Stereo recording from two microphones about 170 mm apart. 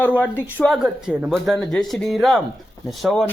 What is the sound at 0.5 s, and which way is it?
Speech, 5° left (ahead or behind).